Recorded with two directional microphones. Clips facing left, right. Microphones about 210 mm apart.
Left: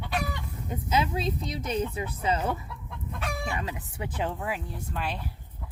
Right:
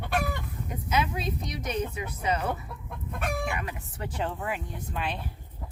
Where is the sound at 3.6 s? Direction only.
20° left (ahead or behind).